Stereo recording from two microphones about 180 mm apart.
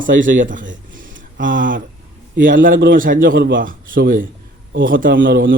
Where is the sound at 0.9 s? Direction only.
50° right (ahead or behind).